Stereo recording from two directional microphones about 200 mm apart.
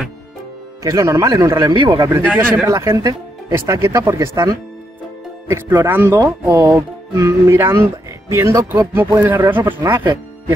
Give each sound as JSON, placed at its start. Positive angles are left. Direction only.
{"t": 0.8, "sound": "speech", "side_deg": -15}
{"t": 2.2, "sound": "speech", "side_deg": 5}
{"t": 2.6, "sound": "speech", "side_deg": -15}